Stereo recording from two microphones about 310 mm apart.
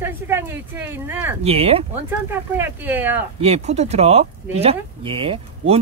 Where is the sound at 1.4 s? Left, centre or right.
Centre.